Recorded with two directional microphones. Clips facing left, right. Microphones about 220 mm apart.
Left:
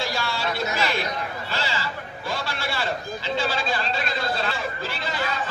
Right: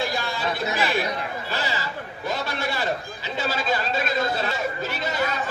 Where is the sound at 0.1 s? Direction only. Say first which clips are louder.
Even; 20° right (ahead or behind).